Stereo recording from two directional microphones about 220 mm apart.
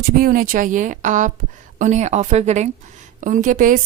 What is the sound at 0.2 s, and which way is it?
Speech, 40° right (ahead or behind).